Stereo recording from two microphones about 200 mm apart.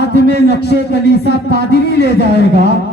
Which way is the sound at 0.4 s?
55° left (ahead or behind).